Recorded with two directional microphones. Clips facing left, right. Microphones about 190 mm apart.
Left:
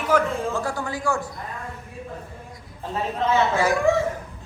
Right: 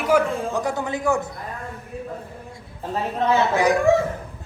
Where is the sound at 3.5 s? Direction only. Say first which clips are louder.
Right 3 dB; 15° right (ahead or behind).